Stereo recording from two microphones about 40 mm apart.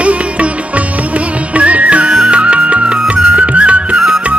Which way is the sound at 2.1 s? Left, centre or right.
Right.